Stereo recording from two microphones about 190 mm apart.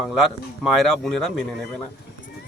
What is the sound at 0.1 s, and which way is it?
A man's voice, centre (ahead or behind).